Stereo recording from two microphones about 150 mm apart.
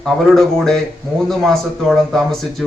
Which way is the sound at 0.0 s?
Centre (ahead or behind).